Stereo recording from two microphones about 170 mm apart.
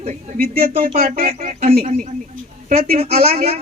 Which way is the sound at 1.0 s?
60° right (ahead or behind).